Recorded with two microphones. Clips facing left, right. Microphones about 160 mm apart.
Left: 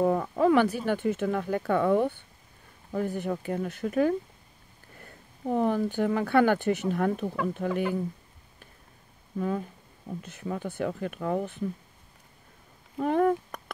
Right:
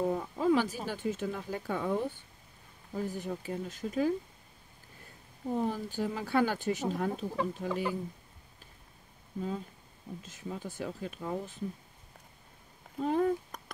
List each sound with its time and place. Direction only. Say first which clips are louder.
0.0 s speech: left 6 dB; 65° left (ahead or behind)
9.4 s speech: left 6 dB; 60° left (ahead or behind)
12.9 s speech: left 5 dB; 60° left (ahead or behind)